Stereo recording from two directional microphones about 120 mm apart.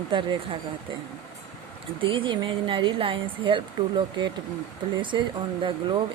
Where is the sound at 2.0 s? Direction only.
45° right (ahead or behind).